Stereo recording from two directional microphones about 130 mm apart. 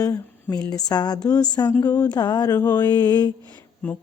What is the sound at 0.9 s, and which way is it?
Speech, 30° left (ahead or behind).